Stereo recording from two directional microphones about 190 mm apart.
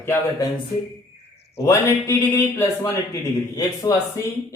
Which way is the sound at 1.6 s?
15° left (ahead or behind).